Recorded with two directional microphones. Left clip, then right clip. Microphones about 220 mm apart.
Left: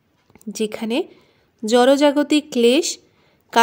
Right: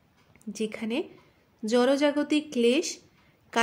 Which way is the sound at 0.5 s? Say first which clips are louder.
Left 9 dB; 40° left (ahead or behind).